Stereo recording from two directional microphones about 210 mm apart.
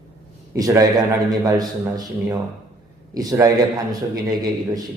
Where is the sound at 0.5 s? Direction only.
15° right (ahead or behind).